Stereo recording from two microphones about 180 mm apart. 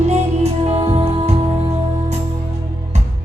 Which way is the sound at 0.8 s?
25° right (ahead or behind).